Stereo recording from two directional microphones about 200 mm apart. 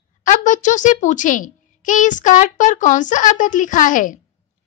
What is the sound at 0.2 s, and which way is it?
A child's voice, 40° left (ahead or behind).